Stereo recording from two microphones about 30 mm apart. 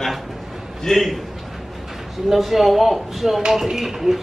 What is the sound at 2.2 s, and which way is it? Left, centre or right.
Speech, centre.